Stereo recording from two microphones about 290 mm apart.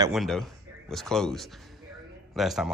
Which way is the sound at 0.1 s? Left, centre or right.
Centre.